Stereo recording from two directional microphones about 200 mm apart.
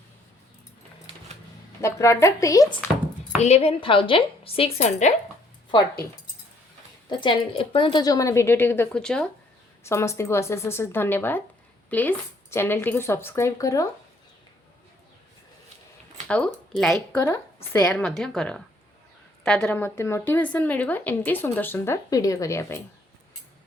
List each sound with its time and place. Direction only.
1.8 s a woman's voice: 15° left (ahead or behind)
3.3 s a woman's voice: 35° left (ahead or behind)
7.1 s a woman's voice: 25° left (ahead or behind)
16.2 s speech: 5° left (ahead or behind)
17.2 s a woman's voice: 15° left (ahead or behind)